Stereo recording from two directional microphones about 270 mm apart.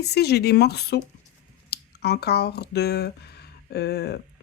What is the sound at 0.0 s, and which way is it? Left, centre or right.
Speech, left.